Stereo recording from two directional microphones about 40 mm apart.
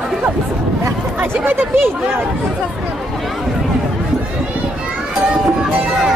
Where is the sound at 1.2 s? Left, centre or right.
Right.